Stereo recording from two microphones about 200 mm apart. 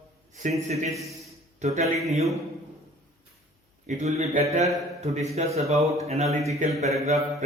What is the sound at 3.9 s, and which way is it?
Speech, 35° right (ahead or behind).